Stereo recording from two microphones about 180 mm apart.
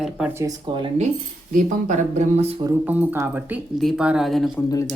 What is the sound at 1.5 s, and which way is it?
Speech, 45° right (ahead or behind).